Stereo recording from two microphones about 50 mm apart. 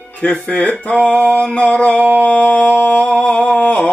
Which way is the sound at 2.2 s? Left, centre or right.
Left.